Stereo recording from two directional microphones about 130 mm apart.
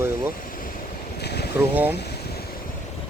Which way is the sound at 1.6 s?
15° right (ahead or behind).